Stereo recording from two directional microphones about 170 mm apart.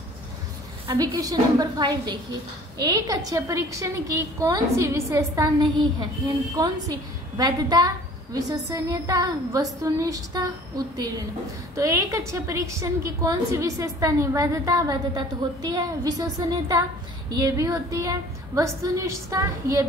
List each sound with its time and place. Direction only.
0.8 s a woman's voice: 20° right (ahead or behind)
7.3 s a woman's voice: 25° right (ahead or behind)
11.7 s a woman's voice: 20° right (ahead or behind)